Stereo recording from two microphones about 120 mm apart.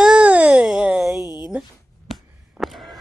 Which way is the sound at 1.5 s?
Centre (ahead or behind).